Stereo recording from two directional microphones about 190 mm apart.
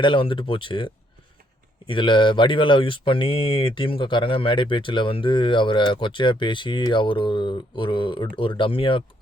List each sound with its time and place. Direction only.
0.0 s speech: 25° left (ahead or behind)
1.9 s speech: 25° left (ahead or behind)